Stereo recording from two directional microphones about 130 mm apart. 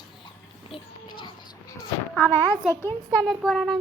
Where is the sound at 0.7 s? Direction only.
40° left (ahead or behind).